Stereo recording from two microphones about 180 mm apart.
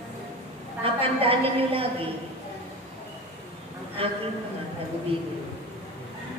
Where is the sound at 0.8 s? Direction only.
30° right (ahead or behind).